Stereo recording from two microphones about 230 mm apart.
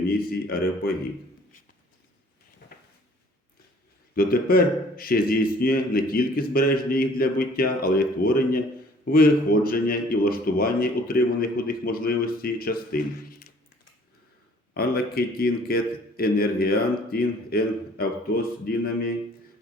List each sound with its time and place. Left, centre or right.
0.0 s a man's voice: left
4.1 s a man's voice: left
14.7 s a man's voice: left